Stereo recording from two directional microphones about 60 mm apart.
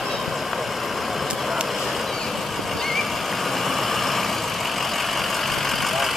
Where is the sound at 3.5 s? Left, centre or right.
Centre.